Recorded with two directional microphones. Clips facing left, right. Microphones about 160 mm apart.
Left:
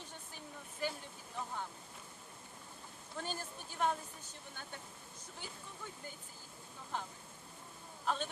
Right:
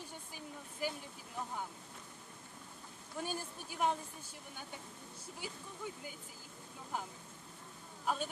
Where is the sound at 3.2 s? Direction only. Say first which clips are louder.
Right 2 dB; 10° right (ahead or behind).